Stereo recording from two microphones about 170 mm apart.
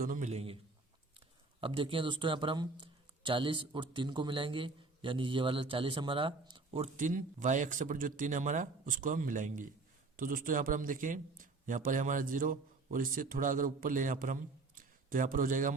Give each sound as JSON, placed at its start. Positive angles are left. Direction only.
{"t": 0.0, "sound": "a man's voice", "side_deg": -50}
{"t": 1.6, "sound": "speech", "side_deg": -30}
{"t": 6.9, "sound": "a man's voice", "side_deg": -50}